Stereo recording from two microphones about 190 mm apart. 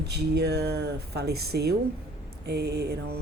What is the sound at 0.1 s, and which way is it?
Speech, 60° right (ahead or behind).